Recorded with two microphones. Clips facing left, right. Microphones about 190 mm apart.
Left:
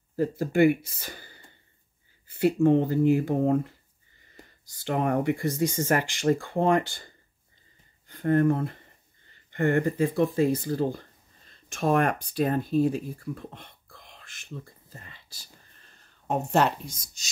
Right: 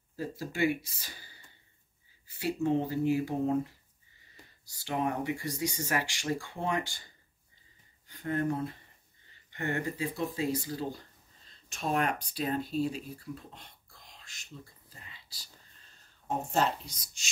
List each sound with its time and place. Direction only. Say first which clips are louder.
0.1 s speech: left 11 dB; 55° left (ahead or behind)
4.8 s speech: left 7 dB; 55° left (ahead or behind)
8.1 s speech: left 9 dB; 55° left (ahead or behind)
16.3 s speech: left 6 dB; 65° left (ahead or behind); by 17.3 s 40° left (ahead or behind)